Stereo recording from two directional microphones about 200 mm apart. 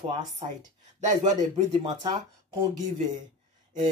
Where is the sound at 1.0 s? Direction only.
35° right (ahead or behind).